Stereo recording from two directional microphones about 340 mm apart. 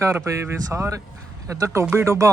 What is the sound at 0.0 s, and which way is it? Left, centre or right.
Speech, centre.